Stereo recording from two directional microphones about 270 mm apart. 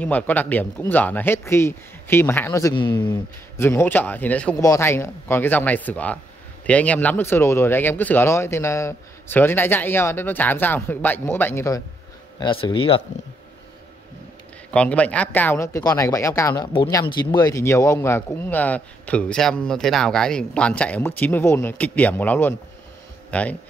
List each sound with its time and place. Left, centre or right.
0.0 s speech: centre
14.7 s a man's voice: centre